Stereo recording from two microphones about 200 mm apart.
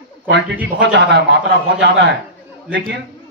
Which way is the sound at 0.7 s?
60° right (ahead or behind).